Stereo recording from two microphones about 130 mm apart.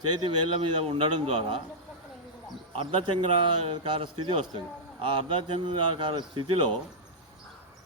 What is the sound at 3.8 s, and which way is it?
A man's voice, 45° right (ahead or behind).